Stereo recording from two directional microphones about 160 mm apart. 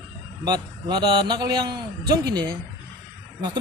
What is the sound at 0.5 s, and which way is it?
Speech, 25° right (ahead or behind).